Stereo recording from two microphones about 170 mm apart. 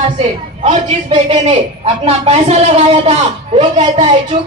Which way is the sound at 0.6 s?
45° right (ahead or behind).